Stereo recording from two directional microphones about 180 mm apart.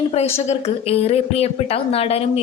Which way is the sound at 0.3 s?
35° left (ahead or behind).